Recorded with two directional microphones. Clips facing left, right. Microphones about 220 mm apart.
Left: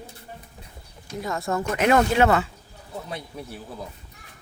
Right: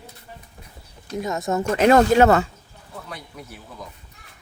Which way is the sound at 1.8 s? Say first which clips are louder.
Right 5 dB; 35° right (ahead or behind).